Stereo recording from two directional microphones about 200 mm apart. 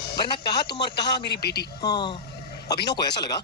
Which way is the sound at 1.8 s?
20° left (ahead or behind).